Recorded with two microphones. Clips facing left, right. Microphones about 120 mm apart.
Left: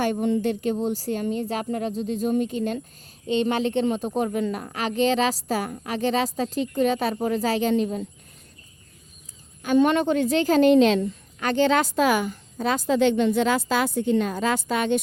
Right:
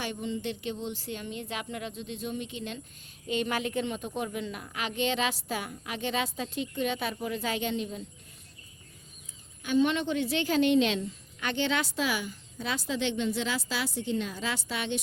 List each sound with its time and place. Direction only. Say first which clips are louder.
0.0 s a woman's voice: left 11 dB; 50° left (ahead or behind)
3.2 s a woman's voice: left 8 dB; 30° left (ahead or behind); by 8.0 s 50° left (ahead or behind)
9.6 s a woman's voice: left 7 dB; 50° left (ahead or behind)